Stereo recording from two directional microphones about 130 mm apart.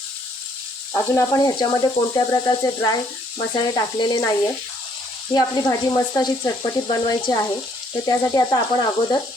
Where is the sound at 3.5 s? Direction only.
35° left (ahead or behind).